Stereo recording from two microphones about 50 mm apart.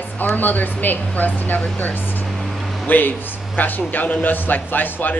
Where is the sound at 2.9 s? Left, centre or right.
Left.